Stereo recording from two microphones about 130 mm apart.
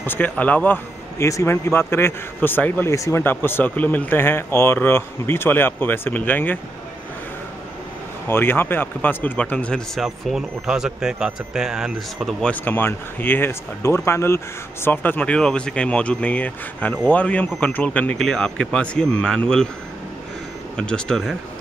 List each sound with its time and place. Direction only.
0.0 s speech: 15° left (ahead or behind)
8.3 s speech: 15° left (ahead or behind); by 12.4 s 5° right (ahead or behind)
12.4 s speech: 10° left (ahead or behind)
20.7 s speech: 5° left (ahead or behind)